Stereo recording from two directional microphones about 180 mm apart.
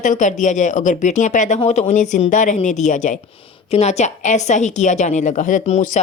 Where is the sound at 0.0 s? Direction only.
45° left (ahead or behind).